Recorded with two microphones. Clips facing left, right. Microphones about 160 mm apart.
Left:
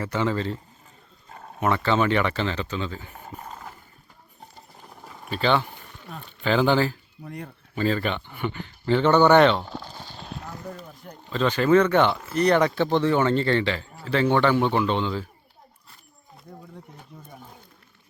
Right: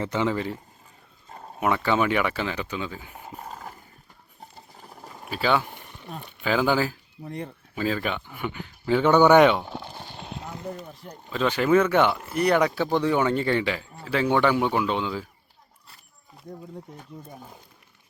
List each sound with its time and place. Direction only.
0.0 s speech: 15° right (ahead or behind)
5.2 s speech: 5° right (ahead or behind)
6.0 s a sound: 20° right (ahead or behind)
6.4 s speech: 5° right (ahead or behind)
7.3 s speech: 25° right (ahead or behind)
7.8 s speech: 5° right (ahead or behind); by 10.8 s 20° right (ahead or behind)
11.3 s speech: 10° right (ahead or behind)